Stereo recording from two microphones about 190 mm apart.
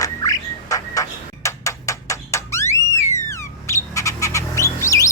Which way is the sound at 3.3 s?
15° left (ahead or behind).